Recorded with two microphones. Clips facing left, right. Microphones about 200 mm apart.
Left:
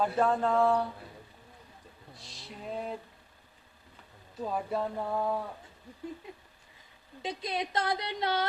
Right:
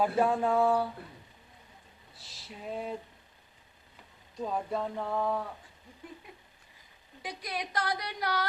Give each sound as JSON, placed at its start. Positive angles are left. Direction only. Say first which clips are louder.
{"t": 0.0, "sound": "speech", "louder": "even", "side_deg": -10}
{"t": 2.1, "sound": "music", "louder": "left 1 dB", "side_deg": 0}
{"t": 4.4, "sound": "speech", "louder": "even", "side_deg": 5}
{"t": 7.2, "sound": "speech", "louder": "left 4 dB", "side_deg": 25}